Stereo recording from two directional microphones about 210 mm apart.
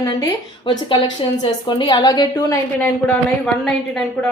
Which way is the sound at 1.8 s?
20° left (ahead or behind).